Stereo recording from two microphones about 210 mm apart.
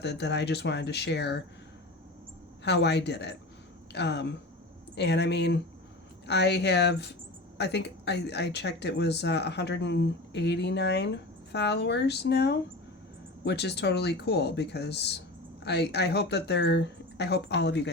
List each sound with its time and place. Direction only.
0.0 s speech: 55° left (ahead or behind)
2.6 s speech: 55° left (ahead or behind)